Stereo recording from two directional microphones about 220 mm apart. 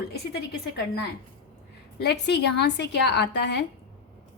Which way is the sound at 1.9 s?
50° left (ahead or behind).